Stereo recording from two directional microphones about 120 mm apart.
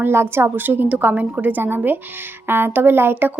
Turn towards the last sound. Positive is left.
turn(degrees=-20)  # may be behind; listen again after turning